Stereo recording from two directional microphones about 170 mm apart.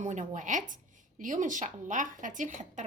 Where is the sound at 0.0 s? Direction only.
45° right (ahead or behind).